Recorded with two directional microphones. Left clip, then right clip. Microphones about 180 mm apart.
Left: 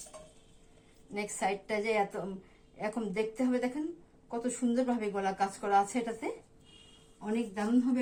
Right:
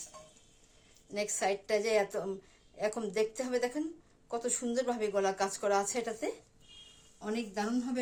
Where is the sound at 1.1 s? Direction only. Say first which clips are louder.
Right 1 dB; 55° right (ahead or behind).